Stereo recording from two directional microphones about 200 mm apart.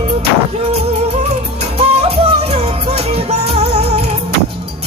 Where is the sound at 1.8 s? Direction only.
30° right (ahead or behind).